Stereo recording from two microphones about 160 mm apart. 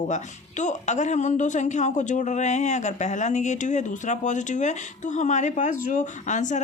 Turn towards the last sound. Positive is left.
turn(degrees=50)  # may be behind; listen again after turning